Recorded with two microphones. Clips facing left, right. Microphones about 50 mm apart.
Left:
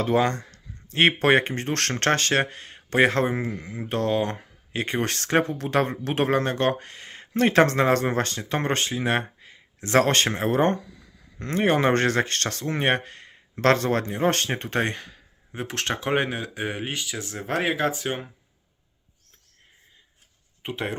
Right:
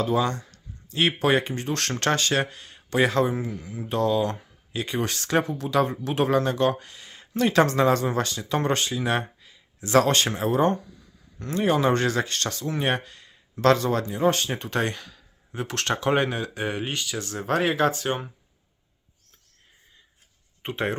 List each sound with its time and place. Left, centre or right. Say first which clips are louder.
0.0 s speech: left 2 dB; left
5.3 s speech: left 1 dB; left
14.5 s speech: left 1 dB; left; by 18.3 s centre
20.6 s speech: right 3 dB; centre